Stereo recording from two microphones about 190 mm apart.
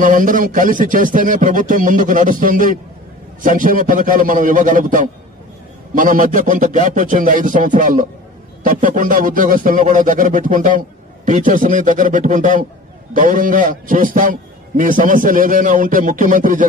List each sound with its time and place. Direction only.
0.0 s speech: 45° right (ahead or behind)